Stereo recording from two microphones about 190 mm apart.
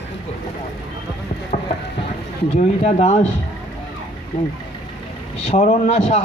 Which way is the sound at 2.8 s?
35° left (ahead or behind).